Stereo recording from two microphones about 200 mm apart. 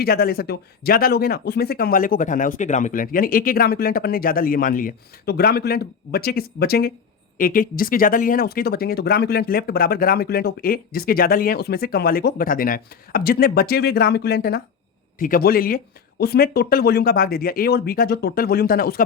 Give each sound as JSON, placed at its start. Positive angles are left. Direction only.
{"t": 0.0, "sound": "speech", "side_deg": 50}